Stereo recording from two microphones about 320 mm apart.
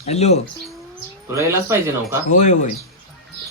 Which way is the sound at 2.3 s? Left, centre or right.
Left.